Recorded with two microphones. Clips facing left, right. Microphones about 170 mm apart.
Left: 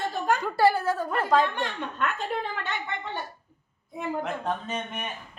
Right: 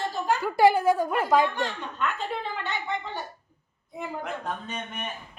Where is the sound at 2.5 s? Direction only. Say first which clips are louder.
Right 2 dB; 55° left (ahead or behind).